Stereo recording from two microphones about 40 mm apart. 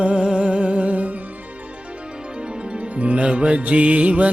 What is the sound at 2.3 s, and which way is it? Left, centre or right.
Music, right.